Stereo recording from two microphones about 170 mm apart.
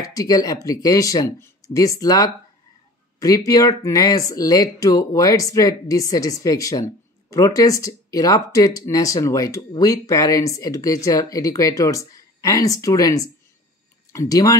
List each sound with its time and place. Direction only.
0.0 s speech: 20° left (ahead or behind)